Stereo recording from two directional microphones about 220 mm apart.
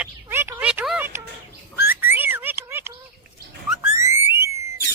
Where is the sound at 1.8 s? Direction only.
10° right (ahead or behind).